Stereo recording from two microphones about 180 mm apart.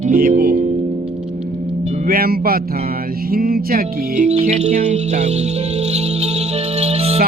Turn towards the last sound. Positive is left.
turn(degrees=-35)  # may be behind; listen again after turning